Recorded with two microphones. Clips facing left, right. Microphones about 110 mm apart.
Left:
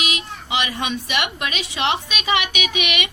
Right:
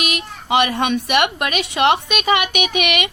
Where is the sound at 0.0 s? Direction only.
50° right (ahead or behind).